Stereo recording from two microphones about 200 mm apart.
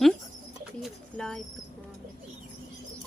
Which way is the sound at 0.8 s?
5° left (ahead or behind).